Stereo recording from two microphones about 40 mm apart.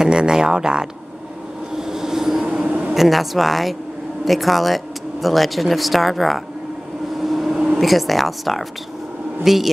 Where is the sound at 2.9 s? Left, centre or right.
Centre.